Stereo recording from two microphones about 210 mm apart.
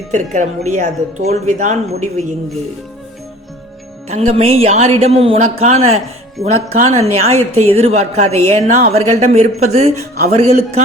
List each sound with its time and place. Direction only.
0.1 s a woman's voice: 35° right (ahead or behind)
4.1 s a man's voice: 30° right (ahead or behind)